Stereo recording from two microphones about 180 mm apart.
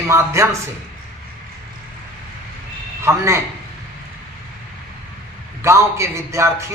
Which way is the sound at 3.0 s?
15° right (ahead or behind).